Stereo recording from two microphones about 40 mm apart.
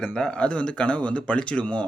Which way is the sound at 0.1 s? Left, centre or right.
Left.